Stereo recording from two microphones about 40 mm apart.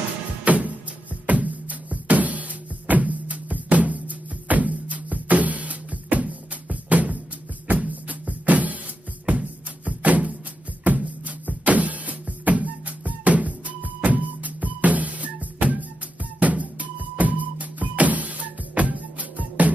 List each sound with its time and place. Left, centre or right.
0.5 s music: right